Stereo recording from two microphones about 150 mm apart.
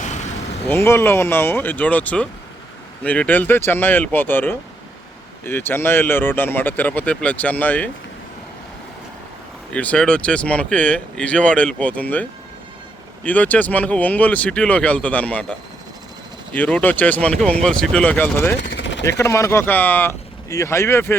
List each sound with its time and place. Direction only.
0.0 s vehicle: 50° left (ahead or behind)
0.7 s speech: 15° left (ahead or behind)
9.7 s speech: 10° left (ahead or behind)
16.6 s speech: 10° left (ahead or behind)